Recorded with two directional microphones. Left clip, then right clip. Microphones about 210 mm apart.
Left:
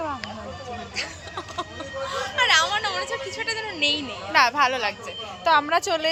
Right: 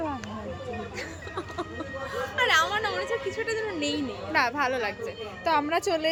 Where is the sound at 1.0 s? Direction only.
25° right (ahead or behind).